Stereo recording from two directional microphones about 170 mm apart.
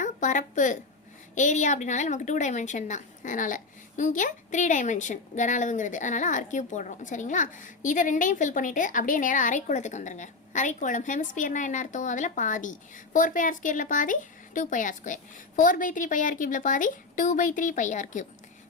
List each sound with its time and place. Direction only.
0.0 s a woman's voice: 45° left (ahead or behind)